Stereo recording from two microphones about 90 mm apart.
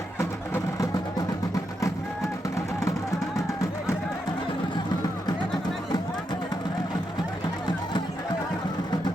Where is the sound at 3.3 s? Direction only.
35° left (ahead or behind).